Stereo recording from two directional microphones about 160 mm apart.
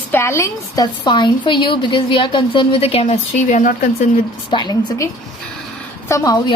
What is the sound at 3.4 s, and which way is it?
Speech, 55° left (ahead or behind).